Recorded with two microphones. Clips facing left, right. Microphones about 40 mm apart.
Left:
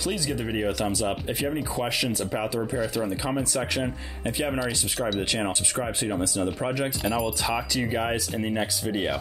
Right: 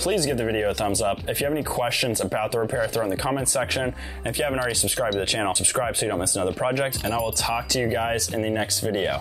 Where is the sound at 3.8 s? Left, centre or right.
Centre.